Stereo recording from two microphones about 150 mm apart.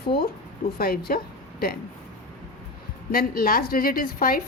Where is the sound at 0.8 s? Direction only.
80° left.